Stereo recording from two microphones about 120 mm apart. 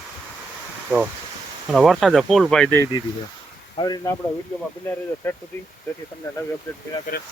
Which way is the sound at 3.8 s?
35° left (ahead or behind).